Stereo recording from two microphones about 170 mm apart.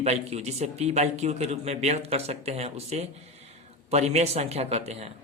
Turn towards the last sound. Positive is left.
turn(degrees=-40)  # may be behind; listen again after turning